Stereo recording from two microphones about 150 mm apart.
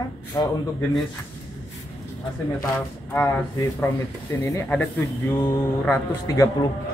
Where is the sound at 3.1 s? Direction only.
20° left (ahead or behind).